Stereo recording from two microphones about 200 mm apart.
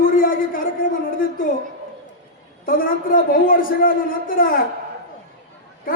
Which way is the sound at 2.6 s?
45° left (ahead or behind).